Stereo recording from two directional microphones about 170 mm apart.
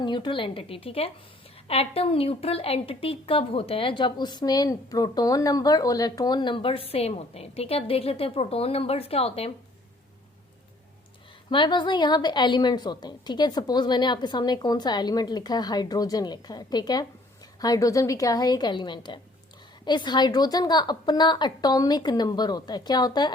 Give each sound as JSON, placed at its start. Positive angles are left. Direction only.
{"t": 0.0, "sound": "a woman's voice", "side_deg": 30}
{"t": 11.4, "sound": "a woman's voice", "side_deg": 30}